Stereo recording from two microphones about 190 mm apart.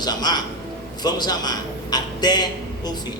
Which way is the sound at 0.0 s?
20° left (ahead or behind).